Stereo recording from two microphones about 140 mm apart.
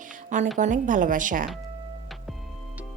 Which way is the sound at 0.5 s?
65° right (ahead or behind).